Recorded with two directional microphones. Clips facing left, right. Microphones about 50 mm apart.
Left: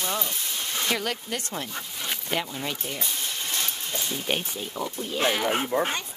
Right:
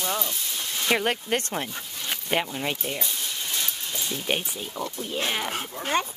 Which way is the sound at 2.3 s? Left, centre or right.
Centre.